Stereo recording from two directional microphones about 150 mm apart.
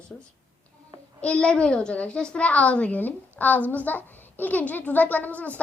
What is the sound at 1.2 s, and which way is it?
A woman's voice, 5° left (ahead or behind).